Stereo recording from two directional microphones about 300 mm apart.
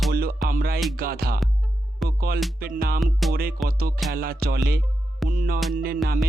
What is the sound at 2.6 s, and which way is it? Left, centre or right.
Music, right.